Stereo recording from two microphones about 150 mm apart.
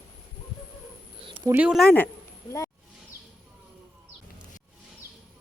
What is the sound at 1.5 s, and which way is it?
Speech, 5° right (ahead or behind).